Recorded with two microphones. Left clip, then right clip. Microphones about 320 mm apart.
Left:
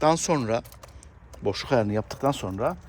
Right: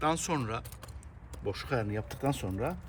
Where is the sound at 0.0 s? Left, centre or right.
Centre.